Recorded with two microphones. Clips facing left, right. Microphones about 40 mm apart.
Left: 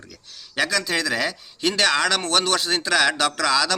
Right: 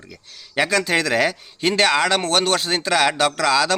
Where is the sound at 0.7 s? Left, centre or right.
Right.